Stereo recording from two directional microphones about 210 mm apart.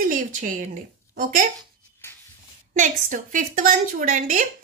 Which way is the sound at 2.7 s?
35° right (ahead or behind).